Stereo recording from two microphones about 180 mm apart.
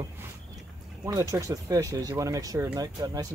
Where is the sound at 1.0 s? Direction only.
20° right (ahead or behind).